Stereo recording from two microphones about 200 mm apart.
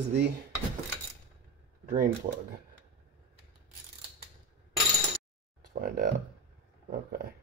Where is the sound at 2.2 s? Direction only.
35° right (ahead or behind).